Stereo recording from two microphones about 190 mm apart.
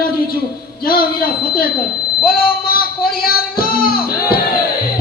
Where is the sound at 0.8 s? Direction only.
55° left (ahead or behind).